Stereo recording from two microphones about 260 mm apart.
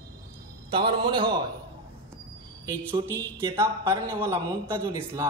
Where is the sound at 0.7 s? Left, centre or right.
Centre.